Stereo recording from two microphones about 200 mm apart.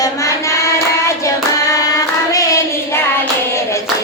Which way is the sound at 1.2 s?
15° left (ahead or behind).